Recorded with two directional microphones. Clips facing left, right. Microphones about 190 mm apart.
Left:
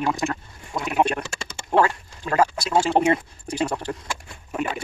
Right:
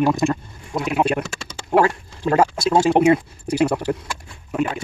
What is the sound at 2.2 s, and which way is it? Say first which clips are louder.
Speech: right 4 dB; 25° right (ahead or behind).